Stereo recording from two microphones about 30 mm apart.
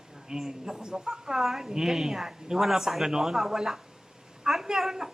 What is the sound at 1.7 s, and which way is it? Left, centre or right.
Speech, right.